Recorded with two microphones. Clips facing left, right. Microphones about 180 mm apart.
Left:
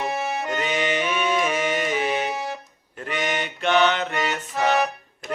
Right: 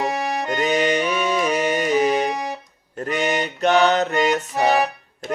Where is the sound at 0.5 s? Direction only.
40° right (ahead or behind).